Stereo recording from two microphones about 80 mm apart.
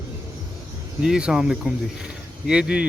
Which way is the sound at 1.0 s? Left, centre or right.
Centre.